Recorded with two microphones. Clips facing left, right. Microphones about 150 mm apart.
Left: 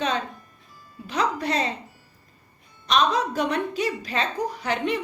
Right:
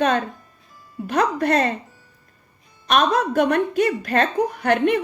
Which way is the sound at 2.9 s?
55° right (ahead or behind).